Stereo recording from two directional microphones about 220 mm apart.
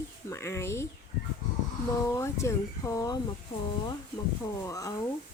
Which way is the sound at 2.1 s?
15° left (ahead or behind).